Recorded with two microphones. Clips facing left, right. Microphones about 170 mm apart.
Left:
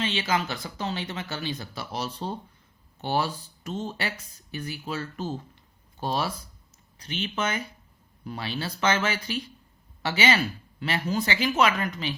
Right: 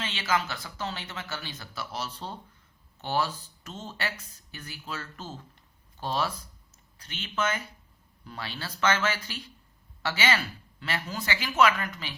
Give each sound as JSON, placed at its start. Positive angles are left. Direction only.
{"t": 0.0, "sound": "speech", "side_deg": 20}